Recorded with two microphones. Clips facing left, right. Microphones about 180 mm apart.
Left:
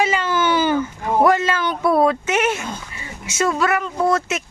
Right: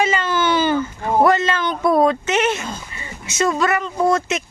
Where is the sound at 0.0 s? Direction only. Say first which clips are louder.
Even; 10° left (ahead or behind).